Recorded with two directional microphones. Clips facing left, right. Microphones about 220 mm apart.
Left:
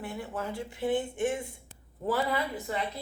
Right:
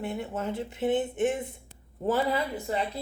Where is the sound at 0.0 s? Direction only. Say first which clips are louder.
Right 4 dB; 25° right (ahead or behind).